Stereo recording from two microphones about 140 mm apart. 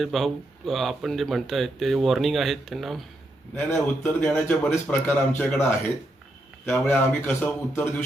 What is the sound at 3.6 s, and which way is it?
A man's voice, 15° left (ahead or behind).